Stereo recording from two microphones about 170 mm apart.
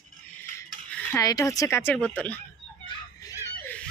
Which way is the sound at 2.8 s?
20° left (ahead or behind).